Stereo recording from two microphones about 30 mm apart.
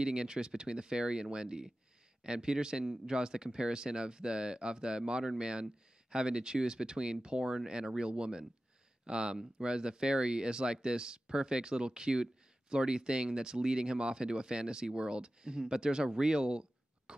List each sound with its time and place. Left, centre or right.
0.0 s speech: right